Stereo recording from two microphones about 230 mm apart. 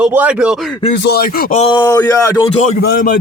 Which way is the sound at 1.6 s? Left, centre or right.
Centre.